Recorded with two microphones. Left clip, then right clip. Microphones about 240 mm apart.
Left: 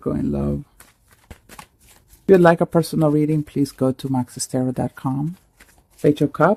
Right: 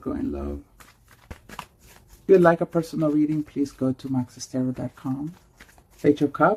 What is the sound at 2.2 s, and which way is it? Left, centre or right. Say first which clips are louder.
Speech: left 3 dB; left.